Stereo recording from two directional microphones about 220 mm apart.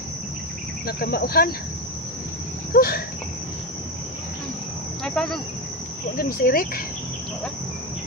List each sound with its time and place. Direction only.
0.9 s cricket: 45° left (ahead or behind)
2.7 s cricket: 45° left (ahead or behind)
5.0 s cricket: centre (ahead or behind)
6.1 s speech: 40° left (ahead or behind)